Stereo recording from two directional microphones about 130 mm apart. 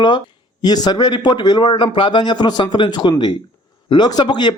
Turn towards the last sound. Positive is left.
turn(degrees=35)  # may be behind; listen again after turning